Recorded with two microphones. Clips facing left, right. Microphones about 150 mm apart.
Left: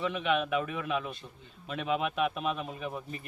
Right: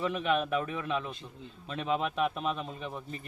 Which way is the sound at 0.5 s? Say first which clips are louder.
Even; 5° left (ahead or behind).